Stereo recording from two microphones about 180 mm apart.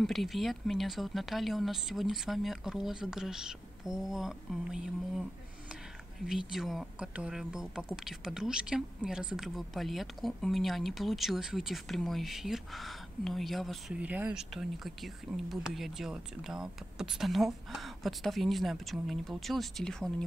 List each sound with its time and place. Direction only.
0.0 s speech: centre (ahead or behind)
6.2 s speech: centre (ahead or behind)